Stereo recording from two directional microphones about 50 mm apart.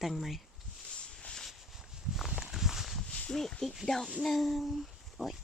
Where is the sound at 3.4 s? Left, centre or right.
Centre.